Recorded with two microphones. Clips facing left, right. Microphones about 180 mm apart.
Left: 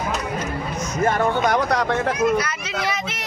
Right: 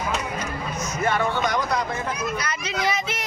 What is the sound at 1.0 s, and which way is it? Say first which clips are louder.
Speech: left 4 dB; 45° left (ahead or behind).